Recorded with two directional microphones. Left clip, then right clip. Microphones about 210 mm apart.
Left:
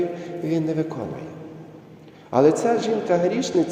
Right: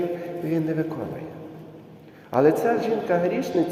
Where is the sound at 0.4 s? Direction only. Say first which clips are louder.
Left 2 dB; 10° left (ahead or behind).